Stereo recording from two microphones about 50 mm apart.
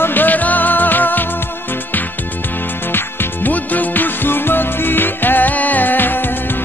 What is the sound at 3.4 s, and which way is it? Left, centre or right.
Music, left.